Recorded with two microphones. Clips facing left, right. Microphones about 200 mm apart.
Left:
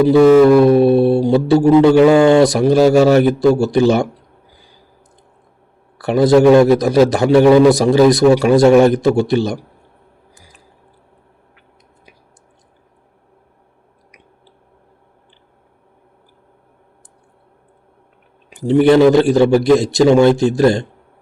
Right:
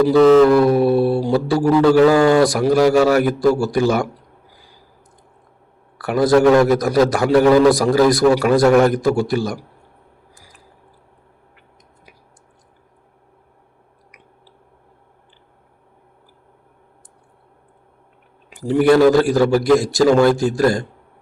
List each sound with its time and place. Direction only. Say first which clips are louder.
0.1 s a man's voice: left 3 dB; 10° left (ahead or behind); by 4.1 s 25° left (ahead or behind)
6.0 s a man's voice: left 3 dB; 25° left (ahead or behind)
18.6 s a man's voice: left 3 dB; 25° left (ahead or behind)